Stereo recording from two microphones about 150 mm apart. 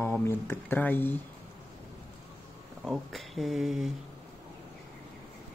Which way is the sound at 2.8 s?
Centre (ahead or behind).